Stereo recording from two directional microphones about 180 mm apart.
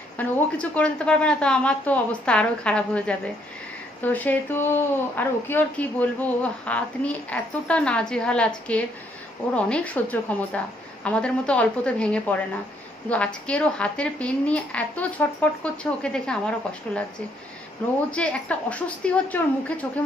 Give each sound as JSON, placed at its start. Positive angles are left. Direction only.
{"t": 0.2, "sound": "speech", "side_deg": 5}
{"t": 18.1, "sound": "speech", "side_deg": 5}